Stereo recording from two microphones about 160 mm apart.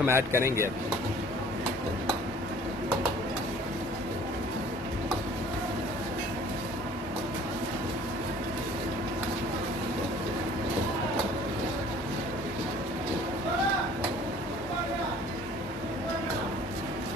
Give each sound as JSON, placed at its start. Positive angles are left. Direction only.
{"t": 0.0, "sound": "speech", "side_deg": -15}